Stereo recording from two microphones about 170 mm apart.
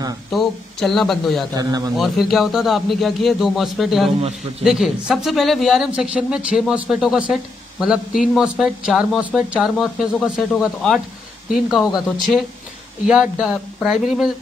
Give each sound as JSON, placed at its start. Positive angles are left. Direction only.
{"t": 0.3, "sound": "speech", "side_deg": 0}
{"t": 1.5, "sound": "a man's voice", "side_deg": -20}
{"t": 2.0, "sound": "speech", "side_deg": 0}
{"t": 13.0, "sound": "speech", "side_deg": 0}